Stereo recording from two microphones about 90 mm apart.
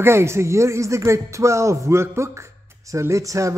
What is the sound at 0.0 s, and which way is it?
Speech, 30° right (ahead or behind).